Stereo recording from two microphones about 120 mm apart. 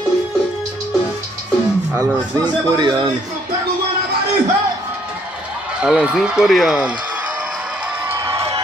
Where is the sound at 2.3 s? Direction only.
35° right (ahead or behind).